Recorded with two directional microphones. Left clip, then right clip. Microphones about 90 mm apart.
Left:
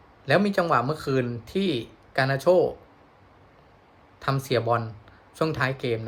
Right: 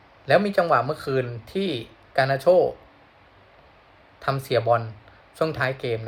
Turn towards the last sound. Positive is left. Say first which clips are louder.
# right 1 dB
turn(degrees=40)  # may be behind; listen again after turning